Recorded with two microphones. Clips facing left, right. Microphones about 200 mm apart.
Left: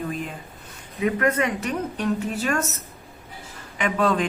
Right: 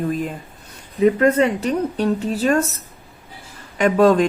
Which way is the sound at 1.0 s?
30° right (ahead or behind).